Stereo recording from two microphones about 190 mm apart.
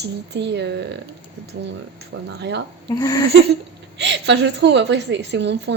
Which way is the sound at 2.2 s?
65° right (ahead or behind).